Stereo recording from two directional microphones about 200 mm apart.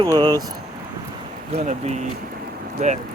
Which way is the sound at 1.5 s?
35° right (ahead or behind).